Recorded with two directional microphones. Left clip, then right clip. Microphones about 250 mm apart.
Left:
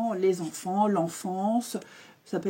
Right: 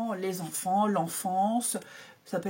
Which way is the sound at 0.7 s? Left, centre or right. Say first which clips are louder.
Left 1 dB; centre.